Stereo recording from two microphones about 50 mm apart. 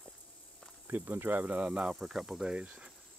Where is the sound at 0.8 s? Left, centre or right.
Right.